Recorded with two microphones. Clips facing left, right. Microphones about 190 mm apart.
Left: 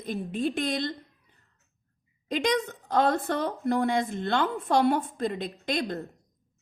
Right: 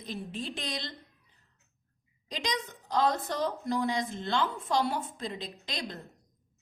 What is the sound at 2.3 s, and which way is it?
A woman's voice, 55° left (ahead or behind).